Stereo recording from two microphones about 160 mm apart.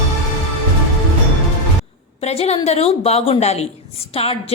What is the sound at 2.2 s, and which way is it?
A woman's voice, 40° left (ahead or behind).